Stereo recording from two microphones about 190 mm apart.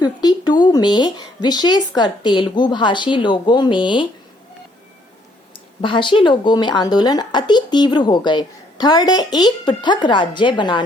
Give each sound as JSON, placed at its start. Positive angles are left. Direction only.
{"t": 0.0, "sound": "a sound", "side_deg": 20}
{"t": 2.0, "sound": "speech", "side_deg": 25}
{"t": 5.8, "sound": "speech", "side_deg": 25}